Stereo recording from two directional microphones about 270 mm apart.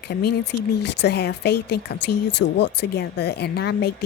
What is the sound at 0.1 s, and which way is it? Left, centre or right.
A woman's voice, left.